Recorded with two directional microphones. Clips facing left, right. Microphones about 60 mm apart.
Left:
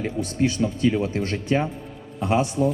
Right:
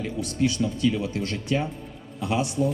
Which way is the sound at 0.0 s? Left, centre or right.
Left.